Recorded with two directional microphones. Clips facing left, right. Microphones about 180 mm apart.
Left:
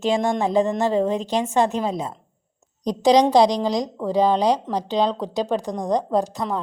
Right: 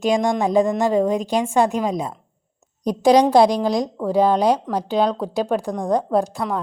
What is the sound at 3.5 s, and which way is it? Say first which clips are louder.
Speech: right 2 dB; 10° right (ahead or behind).